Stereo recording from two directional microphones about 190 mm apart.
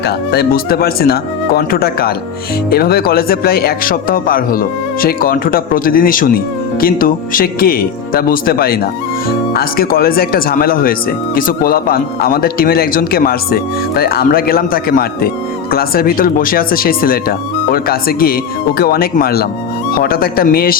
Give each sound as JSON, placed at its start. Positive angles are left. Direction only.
{"t": 0.0, "sound": "speech", "side_deg": 55}